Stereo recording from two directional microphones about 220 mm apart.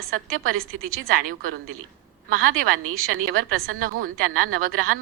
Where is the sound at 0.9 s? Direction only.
40° right (ahead or behind).